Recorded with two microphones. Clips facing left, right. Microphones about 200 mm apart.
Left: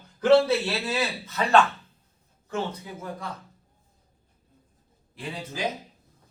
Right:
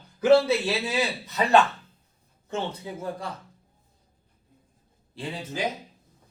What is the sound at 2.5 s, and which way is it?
Speech, 30° right (ahead or behind).